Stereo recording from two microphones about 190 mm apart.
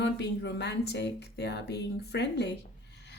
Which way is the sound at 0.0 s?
60° left (ahead or behind).